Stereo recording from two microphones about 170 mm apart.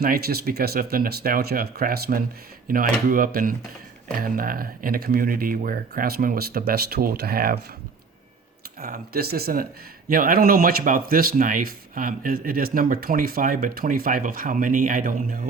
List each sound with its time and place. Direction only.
0.0 s speech: 65° right (ahead or behind)
8.8 s speech: 60° right (ahead or behind)